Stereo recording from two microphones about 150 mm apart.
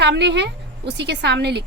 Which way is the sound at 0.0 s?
90° right.